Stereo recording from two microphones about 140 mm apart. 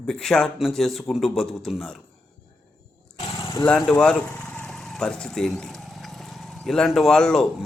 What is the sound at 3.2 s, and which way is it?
Vehicle, 35° left (ahead or behind).